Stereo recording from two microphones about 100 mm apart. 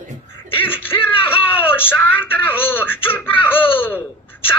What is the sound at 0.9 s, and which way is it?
Speech, 60° left (ahead or behind).